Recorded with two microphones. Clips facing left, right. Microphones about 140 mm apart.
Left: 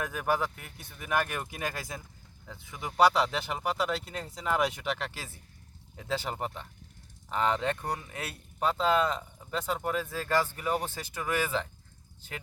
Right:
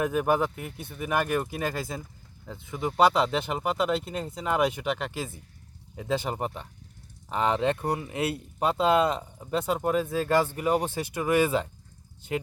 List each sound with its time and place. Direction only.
0.0 s speech: 10° right (ahead or behind)
8.1 s speech: 25° right (ahead or behind)